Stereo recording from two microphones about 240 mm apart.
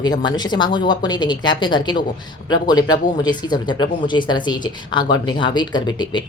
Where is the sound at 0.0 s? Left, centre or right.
Centre.